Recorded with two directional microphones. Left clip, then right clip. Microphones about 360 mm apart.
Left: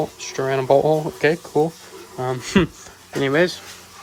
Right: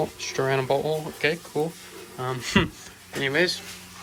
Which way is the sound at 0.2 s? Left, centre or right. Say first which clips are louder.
Left 2 dB; centre.